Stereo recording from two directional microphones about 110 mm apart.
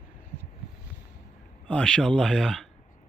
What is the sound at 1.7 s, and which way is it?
Speech, 10° left (ahead or behind).